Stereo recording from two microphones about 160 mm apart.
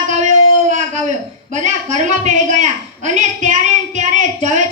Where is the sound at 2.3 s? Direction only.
50° right (ahead or behind).